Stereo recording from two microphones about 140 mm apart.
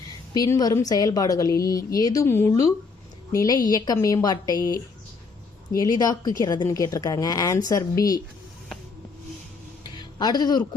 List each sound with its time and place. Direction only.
0.3 s a woman's voice: 25° left (ahead or behind)
10.0 s speech: 30° left (ahead or behind)